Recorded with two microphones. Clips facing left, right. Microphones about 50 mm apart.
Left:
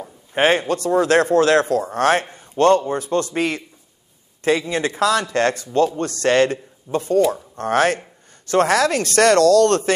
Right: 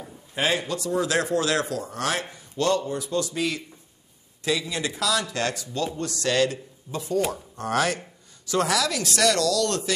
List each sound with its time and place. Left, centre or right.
0.3 s a man's voice: left